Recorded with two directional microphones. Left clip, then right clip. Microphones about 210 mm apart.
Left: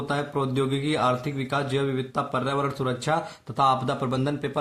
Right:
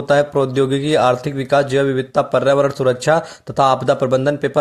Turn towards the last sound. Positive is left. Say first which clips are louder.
# right 12 dB
turn(degrees=-30)  # may be behind; listen again after turning